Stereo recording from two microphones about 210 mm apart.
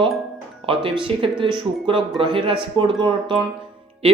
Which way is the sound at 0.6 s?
25° right (ahead or behind).